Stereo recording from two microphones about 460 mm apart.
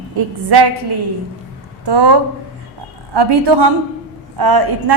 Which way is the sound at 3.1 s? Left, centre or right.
Right.